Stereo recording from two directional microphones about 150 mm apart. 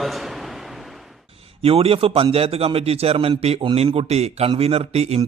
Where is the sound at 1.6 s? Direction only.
40° right (ahead or behind).